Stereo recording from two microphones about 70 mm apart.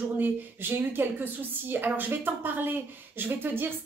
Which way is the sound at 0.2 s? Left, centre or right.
Right.